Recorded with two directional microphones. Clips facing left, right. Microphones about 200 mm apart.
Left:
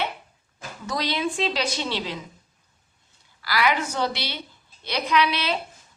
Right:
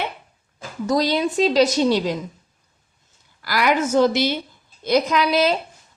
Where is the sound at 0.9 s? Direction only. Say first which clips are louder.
Right 7 dB; 40° right (ahead or behind).